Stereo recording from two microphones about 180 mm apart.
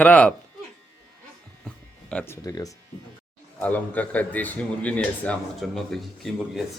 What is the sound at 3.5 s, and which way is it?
A man's voice, 10° left (ahead or behind).